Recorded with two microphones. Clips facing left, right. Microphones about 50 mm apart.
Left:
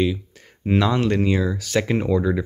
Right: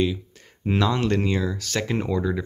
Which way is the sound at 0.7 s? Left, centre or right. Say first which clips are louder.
Left 3 dB; centre.